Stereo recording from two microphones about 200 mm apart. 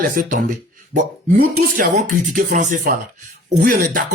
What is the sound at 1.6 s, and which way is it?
Speech, 40° right (ahead or behind).